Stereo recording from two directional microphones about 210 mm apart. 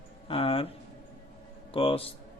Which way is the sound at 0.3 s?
25° left (ahead or behind).